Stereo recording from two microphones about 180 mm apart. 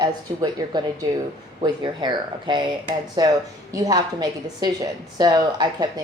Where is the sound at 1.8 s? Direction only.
25° right (ahead or behind).